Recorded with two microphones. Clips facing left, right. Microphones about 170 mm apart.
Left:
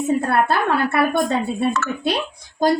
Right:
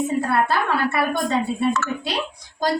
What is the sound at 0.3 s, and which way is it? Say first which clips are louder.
Speech: left 2 dB; 55° left (ahead or behind).